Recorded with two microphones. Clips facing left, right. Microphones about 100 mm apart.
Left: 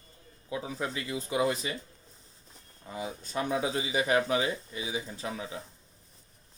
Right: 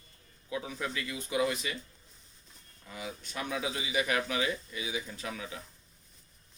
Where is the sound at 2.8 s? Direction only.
30° left (ahead or behind).